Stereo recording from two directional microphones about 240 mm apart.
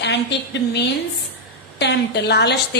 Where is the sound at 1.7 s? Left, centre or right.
Left.